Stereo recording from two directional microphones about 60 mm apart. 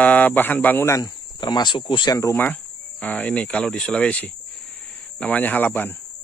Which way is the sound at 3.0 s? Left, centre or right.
Left.